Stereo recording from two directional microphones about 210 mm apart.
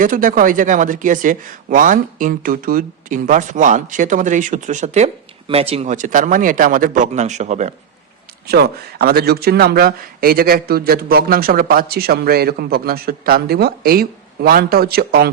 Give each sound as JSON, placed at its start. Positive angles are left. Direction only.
{"t": 0.0, "sound": "speech", "side_deg": -40}
{"t": 8.4, "sound": "speech", "side_deg": -50}